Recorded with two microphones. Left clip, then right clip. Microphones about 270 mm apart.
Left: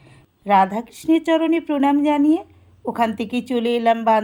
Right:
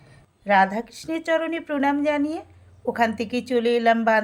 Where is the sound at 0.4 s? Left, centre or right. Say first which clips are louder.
Left 3 dB; centre.